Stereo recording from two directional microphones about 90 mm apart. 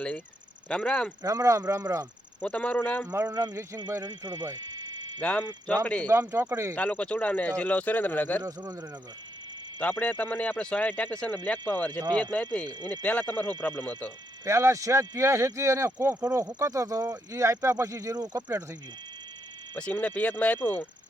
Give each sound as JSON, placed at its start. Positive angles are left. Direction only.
{"t": 0.7, "sound": "speech", "side_deg": 10}
{"t": 1.2, "sound": "speech", "side_deg": -40}
{"t": 2.4, "sound": "speech", "side_deg": 15}
{"t": 3.1, "sound": "speech", "side_deg": -30}
{"t": 5.2, "sound": "speech", "side_deg": 15}
{"t": 6.1, "sound": "speech", "side_deg": -30}
{"t": 6.7, "sound": "speech", "side_deg": 15}
{"t": 8.4, "sound": "speech", "side_deg": -35}
{"t": 9.7, "sound": "speech", "side_deg": 15}
{"t": 14.4, "sound": "speech", "side_deg": -35}
{"t": 19.7, "sound": "speech", "side_deg": 15}